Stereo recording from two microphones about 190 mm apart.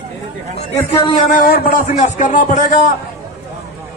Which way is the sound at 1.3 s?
50° left (ahead or behind).